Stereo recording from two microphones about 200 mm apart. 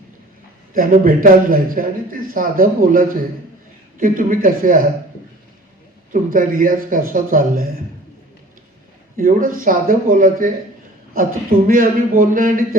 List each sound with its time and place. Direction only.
0.7 s a man's voice: 45° right (ahead or behind)
6.1 s a man's voice: 45° right (ahead or behind)
9.1 s a man's voice: 45° right (ahead or behind)